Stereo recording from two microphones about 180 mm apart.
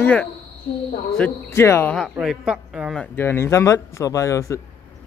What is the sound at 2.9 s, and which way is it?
A man's voice, 15° left (ahead or behind).